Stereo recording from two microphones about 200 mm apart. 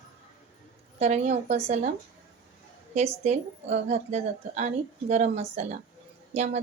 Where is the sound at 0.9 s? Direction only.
35° right (ahead or behind).